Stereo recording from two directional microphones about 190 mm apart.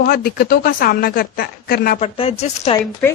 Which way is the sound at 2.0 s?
30° left (ahead or behind).